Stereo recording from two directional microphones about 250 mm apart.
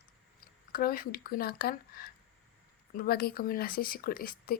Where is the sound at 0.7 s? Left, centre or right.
Left.